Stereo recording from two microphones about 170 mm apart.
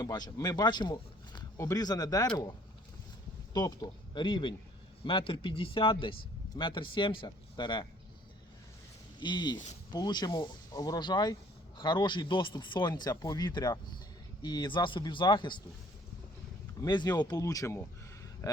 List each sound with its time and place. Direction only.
0.0 s speech: 25° left (ahead or behind)
3.5 s speech: 25° left (ahead or behind)
9.2 s speech: 25° left (ahead or behind)
16.8 s speech: 25° left (ahead or behind)